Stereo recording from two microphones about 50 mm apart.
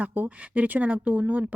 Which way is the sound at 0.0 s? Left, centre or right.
Right.